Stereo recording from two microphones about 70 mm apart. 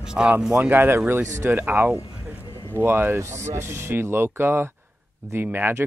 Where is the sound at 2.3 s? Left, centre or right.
Left.